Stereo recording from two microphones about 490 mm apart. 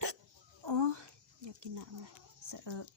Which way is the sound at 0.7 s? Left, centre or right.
Right.